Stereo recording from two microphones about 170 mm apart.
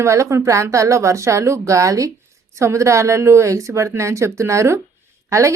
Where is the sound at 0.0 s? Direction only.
15° right (ahead or behind).